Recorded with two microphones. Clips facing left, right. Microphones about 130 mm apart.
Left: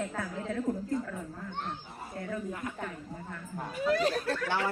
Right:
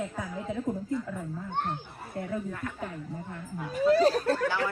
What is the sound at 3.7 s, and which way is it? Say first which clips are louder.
Speech: right 6 dB; 35° right (ahead or behind).